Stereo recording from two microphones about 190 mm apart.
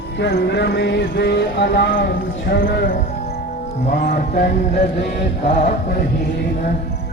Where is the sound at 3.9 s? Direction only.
50° left (ahead or behind).